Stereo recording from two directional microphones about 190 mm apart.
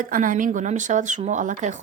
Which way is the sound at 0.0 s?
45° right (ahead or behind).